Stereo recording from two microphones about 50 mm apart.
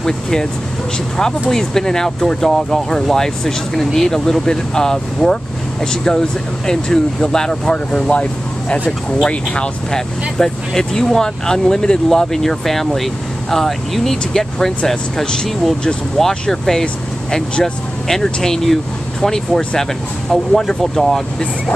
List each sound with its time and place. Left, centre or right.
0.0 s speech: centre
1.5 s speech: centre
16.8 s speech: centre
18.0 s speech: centre